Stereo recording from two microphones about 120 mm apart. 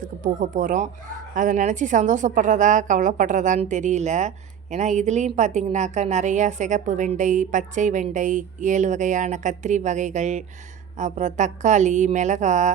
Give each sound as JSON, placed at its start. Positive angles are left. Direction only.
{"t": 0.0, "sound": "a woman's voice", "side_deg": -90}